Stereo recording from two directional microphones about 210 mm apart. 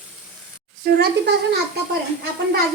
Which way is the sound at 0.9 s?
50° right (ahead or behind).